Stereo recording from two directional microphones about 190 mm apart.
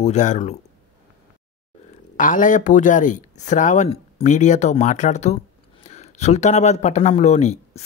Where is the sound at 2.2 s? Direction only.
45° left (ahead or behind).